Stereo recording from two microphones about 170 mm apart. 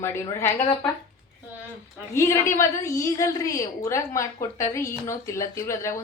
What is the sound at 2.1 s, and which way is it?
A woman's voice, 15° left (ahead or behind).